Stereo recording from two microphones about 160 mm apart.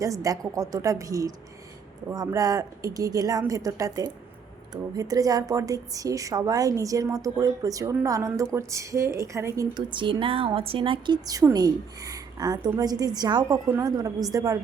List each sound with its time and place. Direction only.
0.0 s a woman's voice: 20° right (ahead or behind)
13.7 s a woman's voice: 15° right (ahead or behind)